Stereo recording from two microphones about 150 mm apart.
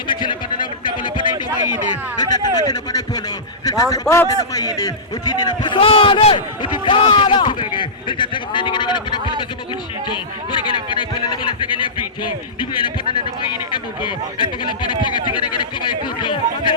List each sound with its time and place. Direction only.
0.1 s a sound: 30° left (ahead or behind)
2.1 s a man's voice: 25° left (ahead or behind)
11.4 s a man's voice: 35° left (ahead or behind)